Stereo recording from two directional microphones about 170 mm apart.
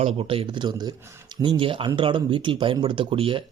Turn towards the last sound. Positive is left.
turn(degrees=-30)  # may be behind; listen again after turning